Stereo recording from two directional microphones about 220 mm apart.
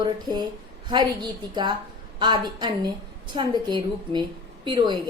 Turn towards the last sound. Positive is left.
turn(degrees=-20)  # may be behind; listen again after turning